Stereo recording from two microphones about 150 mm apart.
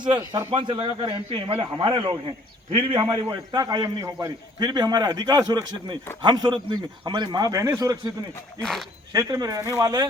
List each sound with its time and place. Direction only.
0.0 s a man's voice: 25° right (ahead or behind)
0.5 s a man's voice: 35° right (ahead or behind)
3.2 s a man's voice: 25° right (ahead or behind)
8.6 s speech: centre (ahead or behind)
9.1 s a man's voice: 25° right (ahead or behind)